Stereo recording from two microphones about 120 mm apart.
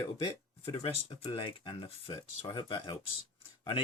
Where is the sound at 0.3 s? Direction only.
45° left (ahead or behind).